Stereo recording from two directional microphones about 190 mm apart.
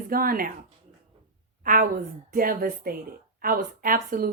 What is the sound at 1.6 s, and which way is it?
A woman's voice, 45° right (ahead or behind).